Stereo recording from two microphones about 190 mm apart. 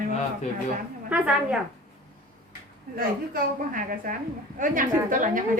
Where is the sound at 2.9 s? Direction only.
45° right (ahead or behind).